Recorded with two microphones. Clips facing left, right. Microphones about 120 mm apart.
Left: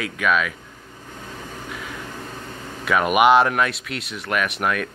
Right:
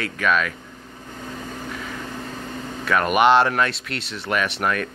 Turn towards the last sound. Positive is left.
turn(degrees=5)  # may be behind; listen again after turning